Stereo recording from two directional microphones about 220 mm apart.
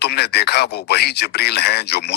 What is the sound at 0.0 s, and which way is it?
Speech, 50° left (ahead or behind).